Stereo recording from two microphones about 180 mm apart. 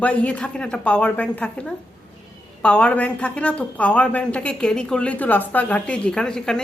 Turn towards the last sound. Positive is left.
turn(degrees=5)  # may be behind; listen again after turning